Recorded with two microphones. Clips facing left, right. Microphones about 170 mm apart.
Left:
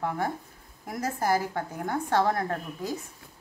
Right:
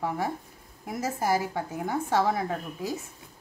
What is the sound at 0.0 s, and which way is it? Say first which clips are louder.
A woman's voice: even; 5° right (ahead or behind).